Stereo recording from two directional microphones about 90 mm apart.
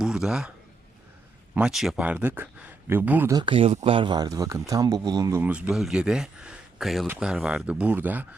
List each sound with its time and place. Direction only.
0.0 s a sound: 5° right (ahead or behind)
1.5 s speech: 5° right (ahead or behind)
3.4 s speech: 80° right; by 4.3 s 55° right (ahead or behind)
4.3 s speech: 35° right (ahead or behind)
5.5 s speech: 10° right (ahead or behind)